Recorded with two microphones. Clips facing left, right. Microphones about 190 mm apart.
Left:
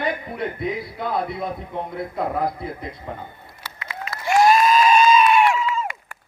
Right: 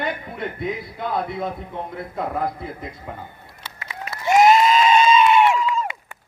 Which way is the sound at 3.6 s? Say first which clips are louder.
Left 1 dB; 20° right (ahead or behind).